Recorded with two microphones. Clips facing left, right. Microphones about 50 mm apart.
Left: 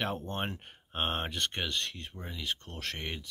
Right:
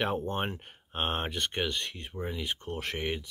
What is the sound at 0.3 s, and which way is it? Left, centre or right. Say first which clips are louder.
Speech: right 3 dB; centre.